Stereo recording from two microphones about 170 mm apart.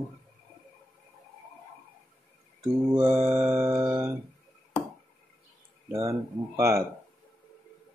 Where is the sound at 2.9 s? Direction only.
10° right (ahead or behind).